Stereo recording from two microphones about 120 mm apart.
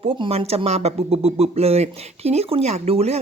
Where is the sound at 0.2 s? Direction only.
55° right (ahead or behind).